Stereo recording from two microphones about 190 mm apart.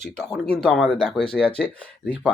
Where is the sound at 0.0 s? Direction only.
5° left (ahead or behind).